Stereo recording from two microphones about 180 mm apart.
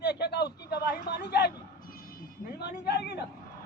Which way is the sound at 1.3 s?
65° left (ahead or behind).